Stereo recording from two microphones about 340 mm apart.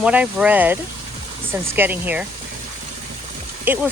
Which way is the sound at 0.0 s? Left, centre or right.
Centre.